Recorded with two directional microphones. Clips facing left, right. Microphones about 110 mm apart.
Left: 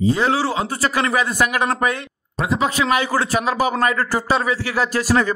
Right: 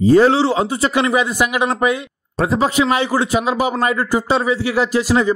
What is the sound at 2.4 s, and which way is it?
Speech, 35° right (ahead or behind).